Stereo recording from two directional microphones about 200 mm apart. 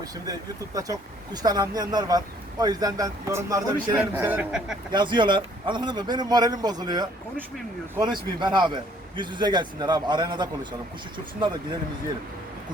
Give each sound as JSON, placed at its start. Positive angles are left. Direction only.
{"t": 0.0, "sound": "a man's voice", "side_deg": -20}
{"t": 4.9, "sound": "speech", "side_deg": -25}